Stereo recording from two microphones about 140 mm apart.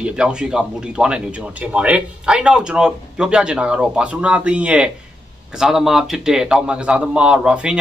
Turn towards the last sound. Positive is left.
turn(degrees=-10)  # may be behind; listen again after turning